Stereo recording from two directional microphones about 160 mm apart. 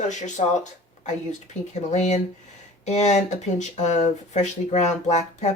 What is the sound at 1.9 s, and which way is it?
Speech, 45° left (ahead or behind).